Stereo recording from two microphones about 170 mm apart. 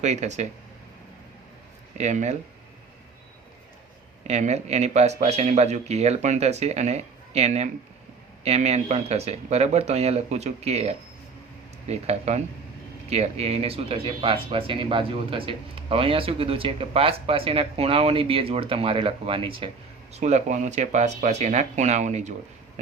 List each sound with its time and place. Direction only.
0.0 s speech: 40° right (ahead or behind)
2.0 s speech: 40° right (ahead or behind)
4.3 s speech: 40° right (ahead or behind)